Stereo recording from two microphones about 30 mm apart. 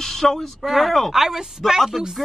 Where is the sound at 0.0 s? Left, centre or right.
Centre.